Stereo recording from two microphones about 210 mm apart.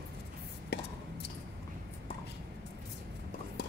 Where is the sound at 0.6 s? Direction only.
55° left (ahead or behind).